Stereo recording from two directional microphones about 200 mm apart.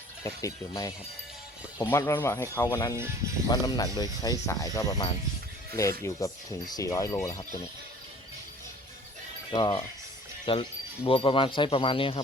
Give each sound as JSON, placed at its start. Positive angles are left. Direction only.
{"t": 0.2, "sound": "speech", "side_deg": 15}
{"t": 9.5, "sound": "speech", "side_deg": 25}